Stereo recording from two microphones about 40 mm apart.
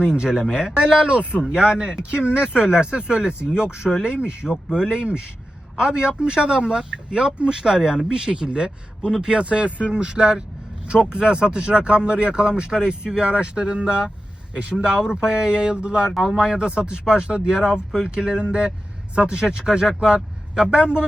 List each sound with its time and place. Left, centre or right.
0.2 s speech: centre
1.1 s speech: right
1.4 s speech: right
4.4 s a man's voice: centre
9.4 s speech: right
16.1 s speech: centre
16.4 s speech: right